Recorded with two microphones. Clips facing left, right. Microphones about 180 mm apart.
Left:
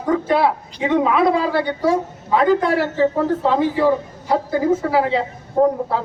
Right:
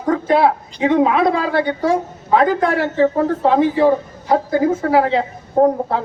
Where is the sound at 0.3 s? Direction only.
50° right (ahead or behind).